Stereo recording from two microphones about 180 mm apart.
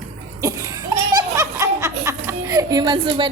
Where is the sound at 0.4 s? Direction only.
20° right (ahead or behind).